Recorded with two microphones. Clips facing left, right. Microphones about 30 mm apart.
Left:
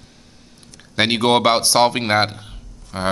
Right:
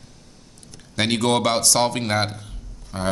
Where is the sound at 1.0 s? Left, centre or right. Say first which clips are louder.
Left 4 dB; left.